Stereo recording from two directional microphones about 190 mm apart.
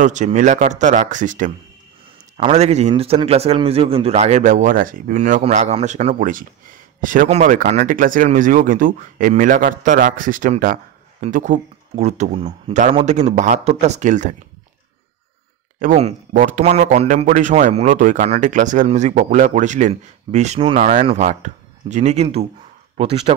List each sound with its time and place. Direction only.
0.0 s speech: 40° right (ahead or behind)
15.8 s speech: 35° right (ahead or behind)